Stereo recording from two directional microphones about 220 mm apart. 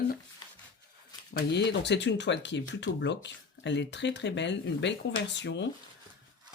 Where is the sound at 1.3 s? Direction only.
50° left (ahead or behind).